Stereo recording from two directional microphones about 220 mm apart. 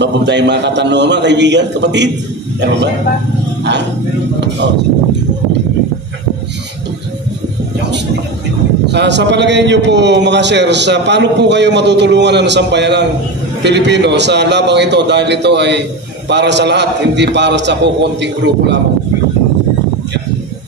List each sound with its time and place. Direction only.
0.0 s a man's voice: 50° right (ahead or behind)
8.8 s a man's voice: 50° right (ahead or behind)